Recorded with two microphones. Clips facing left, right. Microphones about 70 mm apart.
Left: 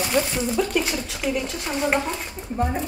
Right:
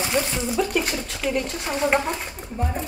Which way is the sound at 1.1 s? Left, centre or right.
Centre.